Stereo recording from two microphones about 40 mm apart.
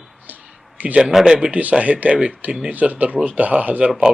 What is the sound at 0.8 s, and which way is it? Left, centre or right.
Speech, right.